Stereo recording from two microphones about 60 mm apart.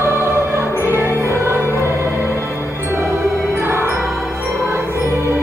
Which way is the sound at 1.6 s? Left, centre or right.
Left.